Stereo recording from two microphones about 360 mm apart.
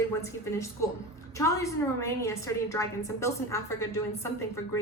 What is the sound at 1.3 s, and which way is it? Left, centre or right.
A woman's voice, centre.